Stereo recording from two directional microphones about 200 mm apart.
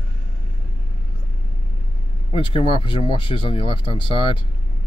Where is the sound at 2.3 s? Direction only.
25° left (ahead or behind).